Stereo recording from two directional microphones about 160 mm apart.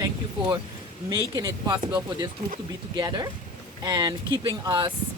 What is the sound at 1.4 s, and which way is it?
Speech, 20° right (ahead or behind).